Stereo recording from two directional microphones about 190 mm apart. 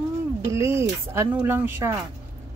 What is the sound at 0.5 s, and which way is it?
Speech, 15° right (ahead or behind).